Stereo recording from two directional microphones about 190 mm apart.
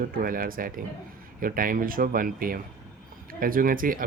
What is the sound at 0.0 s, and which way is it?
Speech, 50° right (ahead or behind).